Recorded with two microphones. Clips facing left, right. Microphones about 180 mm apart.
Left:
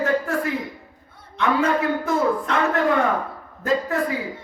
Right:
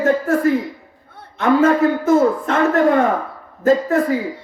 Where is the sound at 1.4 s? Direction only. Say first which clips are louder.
Right 7 dB; 45° right (ahead or behind).